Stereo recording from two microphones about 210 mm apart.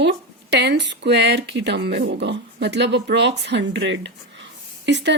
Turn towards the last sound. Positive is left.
turn(degrees=-55)  # may be behind; listen again after turning